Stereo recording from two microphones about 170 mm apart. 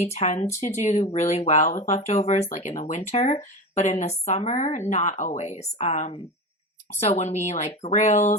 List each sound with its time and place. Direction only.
0.0 s speech: 40° left (ahead or behind)